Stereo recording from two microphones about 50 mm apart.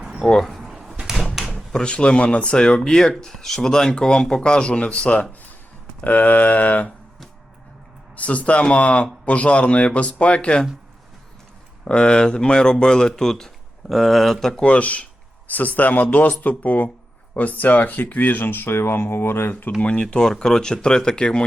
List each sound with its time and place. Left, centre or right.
0.3 s speech: centre
0.6 s drawer open or close: centre
1.5 s speech: centre; by 6.9 s left
8.1 s speech: left
11.9 s speech: centre
14.5 s speech: left
19.8 s speech: left
20.1 s speech: centre